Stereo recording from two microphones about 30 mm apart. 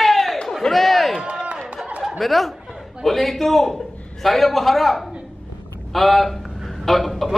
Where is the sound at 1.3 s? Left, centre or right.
Right.